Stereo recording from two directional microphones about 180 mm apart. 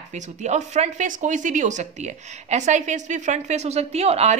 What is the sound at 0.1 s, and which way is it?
Speech, 40° right (ahead or behind).